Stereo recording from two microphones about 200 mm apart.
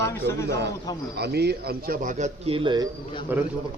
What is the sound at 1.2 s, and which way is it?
A man's voice, 55° right (ahead or behind).